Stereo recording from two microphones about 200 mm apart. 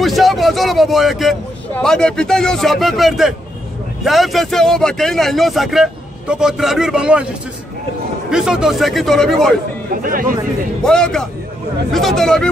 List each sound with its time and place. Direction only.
0.0 s a man's voice: centre (ahead or behind)
8.3 s a man's voice: 5° right (ahead or behind)
10.0 s speech: 45° right (ahead or behind)
10.8 s a man's voice: 5° left (ahead or behind)